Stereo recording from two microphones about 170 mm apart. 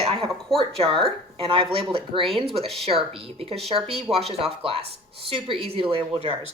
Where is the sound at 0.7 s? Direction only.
30° right (ahead or behind).